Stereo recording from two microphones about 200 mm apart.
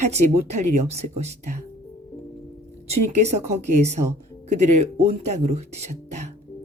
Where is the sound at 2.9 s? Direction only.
35° right (ahead or behind).